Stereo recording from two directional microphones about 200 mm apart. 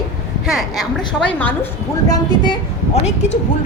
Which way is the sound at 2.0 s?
20° left (ahead or behind).